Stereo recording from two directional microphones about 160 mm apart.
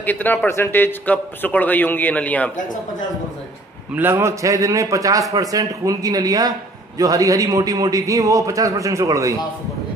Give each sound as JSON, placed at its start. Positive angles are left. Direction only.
{"t": 0.0, "sound": "a man's voice", "side_deg": 10}
{"t": 3.9, "sound": "a man's voice", "side_deg": -15}